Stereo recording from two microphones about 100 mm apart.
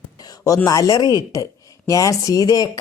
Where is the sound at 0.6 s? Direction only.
35° left (ahead or behind).